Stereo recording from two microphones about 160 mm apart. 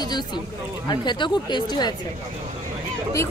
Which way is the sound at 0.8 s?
30° left (ahead or behind).